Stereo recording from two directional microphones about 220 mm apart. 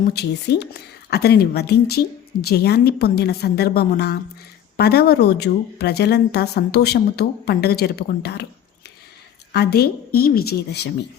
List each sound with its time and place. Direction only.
0.1 s a woman's voice: 50° left (ahead or behind)
9.5 s a woman's voice: 45° left (ahead or behind)